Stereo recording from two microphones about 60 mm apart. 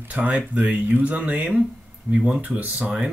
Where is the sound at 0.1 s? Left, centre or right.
Right.